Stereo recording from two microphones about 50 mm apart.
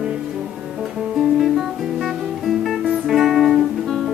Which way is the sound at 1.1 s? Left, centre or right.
Centre.